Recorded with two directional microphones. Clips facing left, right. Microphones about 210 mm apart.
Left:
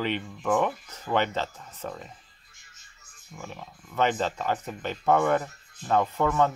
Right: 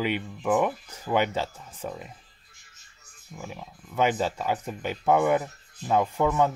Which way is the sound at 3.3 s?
10° right (ahead or behind).